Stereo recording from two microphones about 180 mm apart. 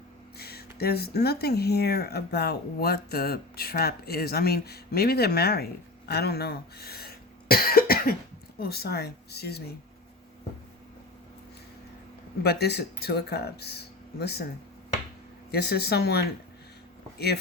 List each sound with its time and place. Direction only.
0.3 s speech: 60° left (ahead or behind)
12.4 s speech: 65° left (ahead or behind)
15.5 s speech: 65° left (ahead or behind)